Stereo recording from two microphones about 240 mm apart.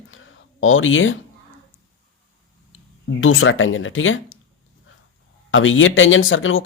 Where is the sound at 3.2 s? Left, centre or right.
Left.